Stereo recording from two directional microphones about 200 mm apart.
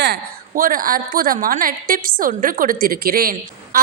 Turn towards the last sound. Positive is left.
turn(degrees=-45)  # may be behind; listen again after turning